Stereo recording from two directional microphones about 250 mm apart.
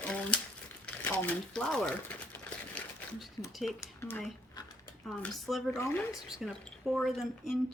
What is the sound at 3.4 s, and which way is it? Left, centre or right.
Speech, centre.